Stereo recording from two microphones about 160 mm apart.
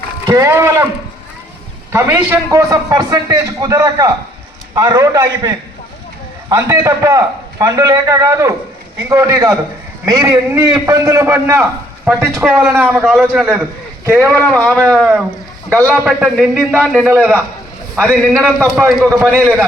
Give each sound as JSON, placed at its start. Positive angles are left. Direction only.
{"t": 0.3, "sound": "a man's voice", "side_deg": -20}
{"t": 1.9, "sound": "a man's voice", "side_deg": -15}
{"t": 18.6, "sound": "a man's voice", "side_deg": -15}